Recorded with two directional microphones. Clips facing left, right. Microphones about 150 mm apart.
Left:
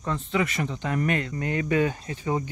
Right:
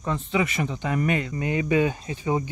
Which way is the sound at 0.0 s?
15° right (ahead or behind).